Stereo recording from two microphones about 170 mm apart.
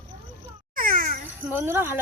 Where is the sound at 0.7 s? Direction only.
55° right (ahead or behind).